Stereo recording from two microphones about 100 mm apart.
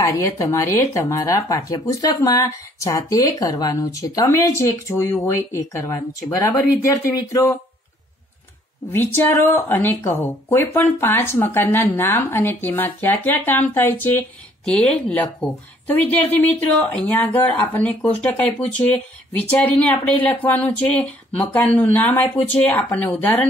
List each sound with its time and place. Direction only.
0.0 s speech: 30° left (ahead or behind)
8.9 s speech: 20° left (ahead or behind)